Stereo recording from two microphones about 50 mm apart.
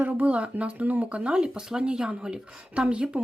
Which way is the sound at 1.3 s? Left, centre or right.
Centre.